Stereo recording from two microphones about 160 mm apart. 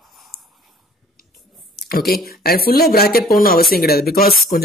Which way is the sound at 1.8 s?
80° left.